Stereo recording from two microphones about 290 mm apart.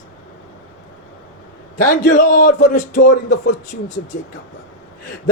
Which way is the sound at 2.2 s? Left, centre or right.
Left.